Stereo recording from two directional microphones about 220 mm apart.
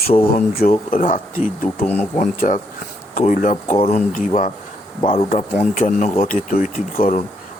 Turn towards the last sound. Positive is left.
turn(degrees=40)  # may be behind; listen again after turning